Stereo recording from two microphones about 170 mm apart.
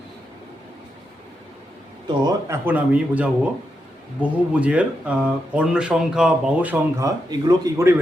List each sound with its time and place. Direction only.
2.2 s speech: 15° right (ahead or behind)
7.3 s speech: 25° right (ahead or behind)